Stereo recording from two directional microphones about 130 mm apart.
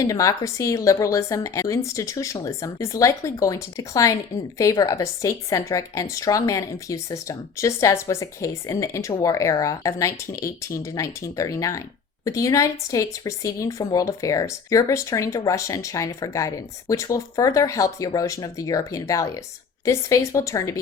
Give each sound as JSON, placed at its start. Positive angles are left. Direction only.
{"t": 0.0, "sound": "speech", "side_deg": 25}